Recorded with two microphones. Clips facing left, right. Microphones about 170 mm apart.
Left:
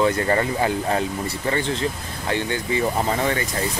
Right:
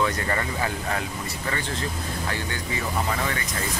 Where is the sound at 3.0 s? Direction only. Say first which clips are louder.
Left 5 dB; 35° left (ahead or behind).